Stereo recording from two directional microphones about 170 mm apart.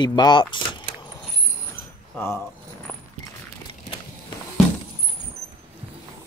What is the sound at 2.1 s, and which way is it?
Speech, 15° left (ahead or behind).